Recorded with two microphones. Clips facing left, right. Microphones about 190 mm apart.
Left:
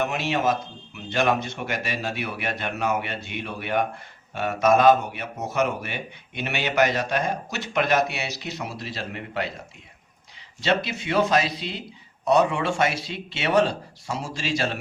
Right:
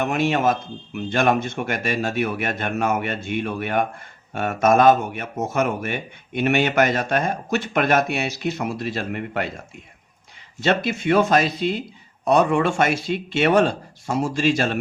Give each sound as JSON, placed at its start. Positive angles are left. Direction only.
{"t": 0.0, "sound": "speech", "side_deg": -50}
{"t": 10.6, "sound": "speech", "side_deg": -50}